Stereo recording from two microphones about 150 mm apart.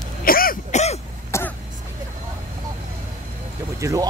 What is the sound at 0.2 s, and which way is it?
Throat clearing, 75° left (ahead or behind).